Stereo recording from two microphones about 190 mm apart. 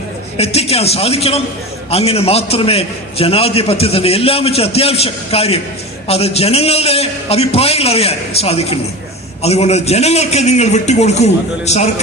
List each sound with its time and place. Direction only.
0.3 s a man's voice: 35° left (ahead or behind)